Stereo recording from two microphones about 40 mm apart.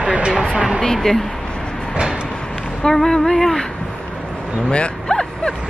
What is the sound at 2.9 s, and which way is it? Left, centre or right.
Speech, centre.